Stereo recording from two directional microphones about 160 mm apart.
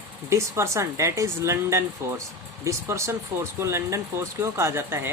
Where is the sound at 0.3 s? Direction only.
20° right (ahead or behind).